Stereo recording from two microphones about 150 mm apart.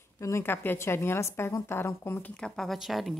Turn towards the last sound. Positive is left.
turn(degrees=0)  # may be behind; listen again after turning